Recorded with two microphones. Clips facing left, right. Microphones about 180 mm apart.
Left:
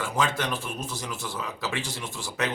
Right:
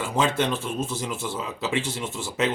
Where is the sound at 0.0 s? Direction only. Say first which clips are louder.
Right 4 dB; 25° right (ahead or behind).